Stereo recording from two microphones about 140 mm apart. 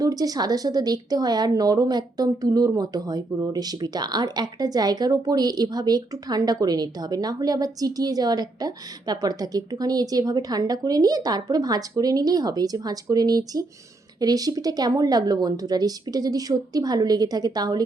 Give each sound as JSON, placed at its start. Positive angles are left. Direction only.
{"t": 0.0, "sound": "speech", "side_deg": -25}